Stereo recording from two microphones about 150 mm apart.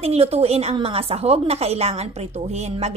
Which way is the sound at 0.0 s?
40° right (ahead or behind).